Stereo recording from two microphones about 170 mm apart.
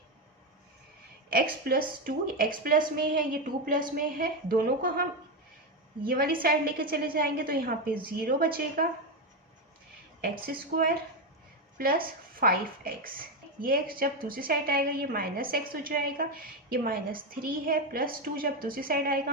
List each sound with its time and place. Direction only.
1.3 s a woman's voice: 60° right (ahead or behind)
10.2 s a woman's voice: 65° right (ahead or behind)